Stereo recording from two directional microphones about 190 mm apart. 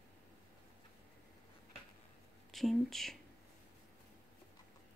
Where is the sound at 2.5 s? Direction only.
Centre (ahead or behind).